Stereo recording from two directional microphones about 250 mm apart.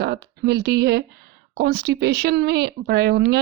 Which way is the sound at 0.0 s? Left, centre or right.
Right.